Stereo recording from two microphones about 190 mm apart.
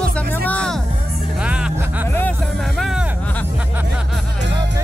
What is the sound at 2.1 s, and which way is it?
Music, 10° left (ahead or behind).